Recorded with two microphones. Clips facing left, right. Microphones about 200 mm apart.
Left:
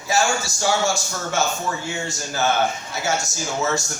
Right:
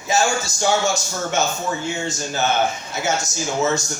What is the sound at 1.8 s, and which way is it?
A man's voice, 20° right (ahead or behind).